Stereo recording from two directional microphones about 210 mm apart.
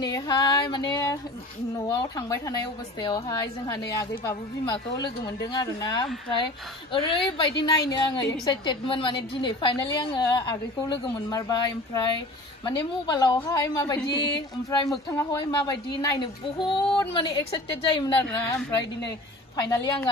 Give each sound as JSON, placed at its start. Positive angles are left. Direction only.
{"t": 0.0, "sound": "a woman's voice", "side_deg": 20}
{"t": 19.5, "sound": "a woman's voice", "side_deg": 15}